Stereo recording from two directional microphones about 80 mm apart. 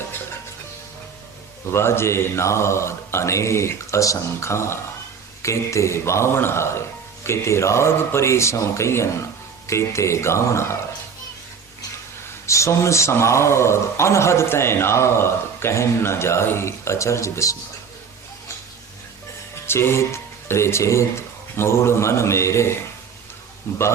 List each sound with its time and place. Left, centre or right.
1.7 s a man's voice: left
12.5 s a man's voice: left
19.6 s a man's voice: left